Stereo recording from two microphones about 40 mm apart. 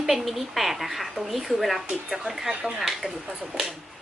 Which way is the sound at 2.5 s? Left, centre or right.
Right.